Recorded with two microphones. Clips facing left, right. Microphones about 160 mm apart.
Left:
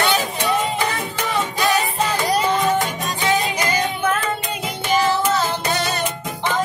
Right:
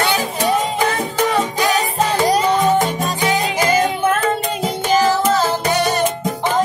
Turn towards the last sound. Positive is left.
turn(degrees=-40)  # may be behind; listen again after turning